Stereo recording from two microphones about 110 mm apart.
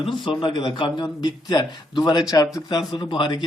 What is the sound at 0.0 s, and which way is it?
A man's voice, 50° left (ahead or behind).